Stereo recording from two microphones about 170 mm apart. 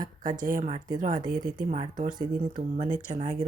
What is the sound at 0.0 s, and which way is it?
Speech, 50° right (ahead or behind).